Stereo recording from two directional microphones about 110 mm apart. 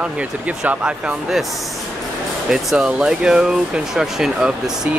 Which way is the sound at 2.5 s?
5° right (ahead or behind).